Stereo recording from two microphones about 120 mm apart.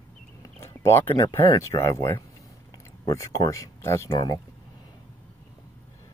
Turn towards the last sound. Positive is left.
turn(degrees=35)  # may be behind; listen again after turning